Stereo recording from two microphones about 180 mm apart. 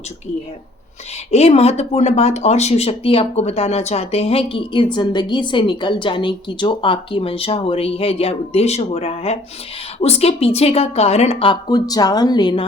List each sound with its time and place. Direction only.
1.3 s speech: 35° left (ahead or behind)